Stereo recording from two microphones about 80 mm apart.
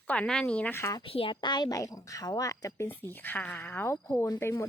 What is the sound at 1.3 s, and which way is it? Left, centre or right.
Speech, left.